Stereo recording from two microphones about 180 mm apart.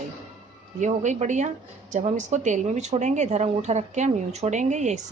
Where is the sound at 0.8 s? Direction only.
40° right (ahead or behind).